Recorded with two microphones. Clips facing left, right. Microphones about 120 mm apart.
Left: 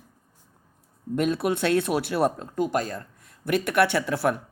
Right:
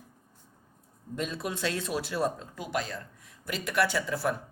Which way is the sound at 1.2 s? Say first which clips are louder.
Left 10 dB; 60° left (ahead or behind).